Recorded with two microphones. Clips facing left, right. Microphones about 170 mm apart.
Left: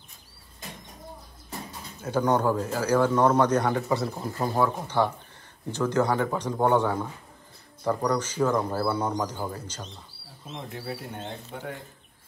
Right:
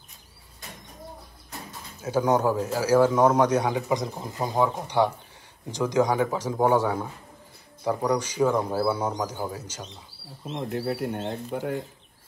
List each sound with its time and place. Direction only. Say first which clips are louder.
2.0 s a man's voice: right 1 dB; 5° right (ahead or behind)
10.5 s speech: right 7 dB; 60° right (ahead or behind)